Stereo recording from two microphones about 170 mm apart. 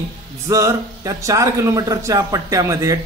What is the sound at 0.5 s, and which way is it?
A man's voice, 20° right (ahead or behind).